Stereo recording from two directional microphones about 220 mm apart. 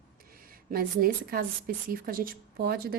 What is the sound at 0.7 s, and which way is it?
A woman's voice, 40° right (ahead or behind).